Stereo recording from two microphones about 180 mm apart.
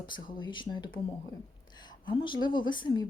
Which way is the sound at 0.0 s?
25° left (ahead or behind).